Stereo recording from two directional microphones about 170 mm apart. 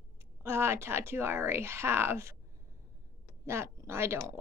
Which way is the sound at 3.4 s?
15° right (ahead or behind).